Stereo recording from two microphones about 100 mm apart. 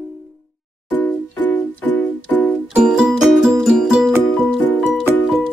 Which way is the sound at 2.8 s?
5° right (ahead or behind).